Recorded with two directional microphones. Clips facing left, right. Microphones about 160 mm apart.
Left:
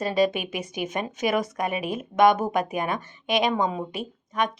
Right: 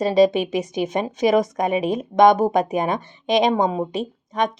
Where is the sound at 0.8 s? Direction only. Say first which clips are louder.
Right 6 dB; 35° right (ahead or behind).